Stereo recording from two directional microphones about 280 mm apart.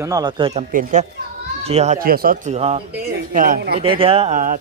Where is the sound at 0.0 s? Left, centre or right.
Centre; by 3.8 s right.